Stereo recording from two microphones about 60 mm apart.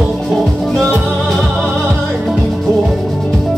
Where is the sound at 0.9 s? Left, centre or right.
Right.